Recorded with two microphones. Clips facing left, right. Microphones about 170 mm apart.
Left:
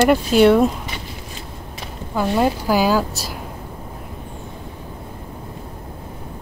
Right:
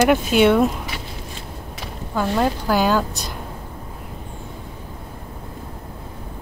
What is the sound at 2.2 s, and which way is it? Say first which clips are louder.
A woman's voice: left 2 dB; 10° left (ahead or behind).